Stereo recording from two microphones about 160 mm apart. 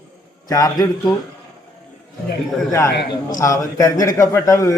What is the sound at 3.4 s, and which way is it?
A man's voice, 20° left (ahead or behind).